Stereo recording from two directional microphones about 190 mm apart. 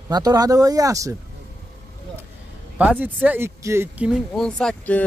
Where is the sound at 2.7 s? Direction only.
10° right (ahead or behind).